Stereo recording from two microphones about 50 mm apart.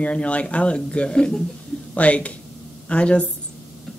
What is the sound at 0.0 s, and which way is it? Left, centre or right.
Speech, left.